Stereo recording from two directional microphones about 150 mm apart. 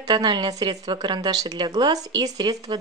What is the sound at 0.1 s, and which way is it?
A woman's voice, 30° right (ahead or behind).